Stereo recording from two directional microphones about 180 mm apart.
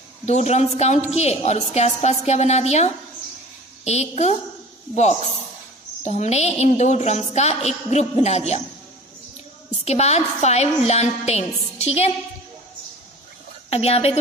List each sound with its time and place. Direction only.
0.2 s a woman's voice: 40° left (ahead or behind)
9.8 s a woman's voice: 35° left (ahead or behind)
13.7 s a woman's voice: 35° left (ahead or behind)